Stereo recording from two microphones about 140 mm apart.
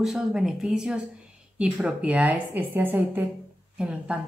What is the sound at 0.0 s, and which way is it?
Speech, centre (ahead or behind).